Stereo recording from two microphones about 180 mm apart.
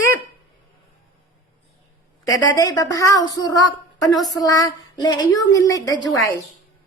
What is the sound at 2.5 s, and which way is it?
A woman's voice, 20° left (ahead or behind).